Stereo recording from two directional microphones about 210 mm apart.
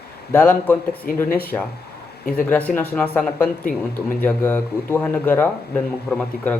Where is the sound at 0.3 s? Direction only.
5° left (ahead or behind).